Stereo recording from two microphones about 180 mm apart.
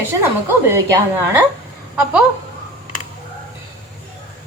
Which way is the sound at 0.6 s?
15° right (ahead or behind).